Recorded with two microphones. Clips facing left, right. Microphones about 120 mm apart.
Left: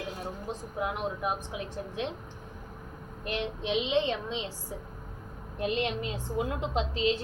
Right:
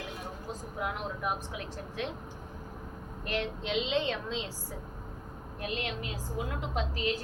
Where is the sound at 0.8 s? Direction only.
20° left (ahead or behind).